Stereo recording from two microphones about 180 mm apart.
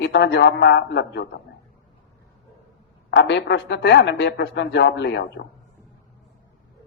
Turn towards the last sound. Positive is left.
turn(degrees=75)  # may be behind; listen again after turning